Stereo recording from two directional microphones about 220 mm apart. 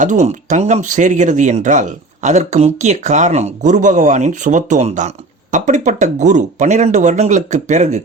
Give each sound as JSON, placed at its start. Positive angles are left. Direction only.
{"t": 0.0, "sound": "speech", "side_deg": -35}